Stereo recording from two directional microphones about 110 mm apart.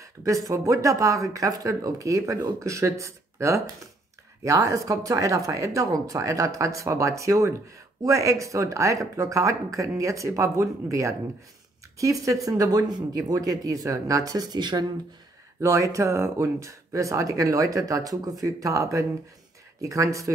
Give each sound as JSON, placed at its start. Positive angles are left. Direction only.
{"t": 0.0, "sound": "speech", "side_deg": -30}
{"t": 15.6, "sound": "speech", "side_deg": -30}